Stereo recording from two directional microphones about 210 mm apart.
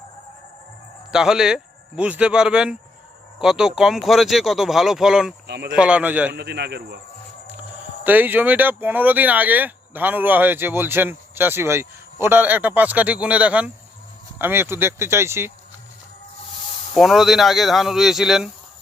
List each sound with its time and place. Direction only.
1.1 s speech: 5° right (ahead or behind)
6.3 s speech: 50° right (ahead or behind)
8.0 s speech: 10° right (ahead or behind)
16.9 s speech: centre (ahead or behind)